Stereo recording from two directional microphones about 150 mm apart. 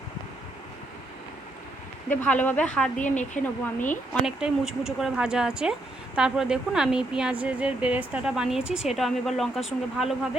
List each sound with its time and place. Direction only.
2.0 s speech: 10° left (ahead or behind)
3.0 s speech: 55° left (ahead or behind)
4.3 s speech: 5° right (ahead or behind)